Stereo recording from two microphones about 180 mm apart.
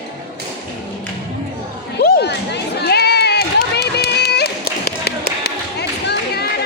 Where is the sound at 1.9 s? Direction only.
65° left (ahead or behind).